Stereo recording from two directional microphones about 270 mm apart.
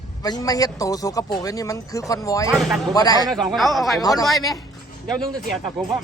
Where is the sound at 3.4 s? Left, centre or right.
Centre.